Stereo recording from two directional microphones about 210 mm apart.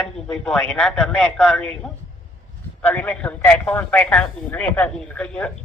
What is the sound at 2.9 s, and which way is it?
A man's voice, 5° left (ahead or behind).